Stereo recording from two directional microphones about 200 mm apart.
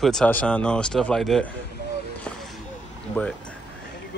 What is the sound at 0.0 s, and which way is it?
Speech, 5° left (ahead or behind).